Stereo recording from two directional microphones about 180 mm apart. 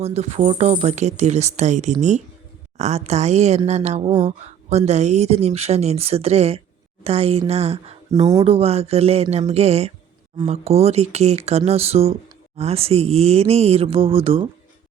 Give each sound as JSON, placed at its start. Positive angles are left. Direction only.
{"t": 0.0, "sound": "speech", "side_deg": -35}
{"t": 8.1, "sound": "speech", "side_deg": -20}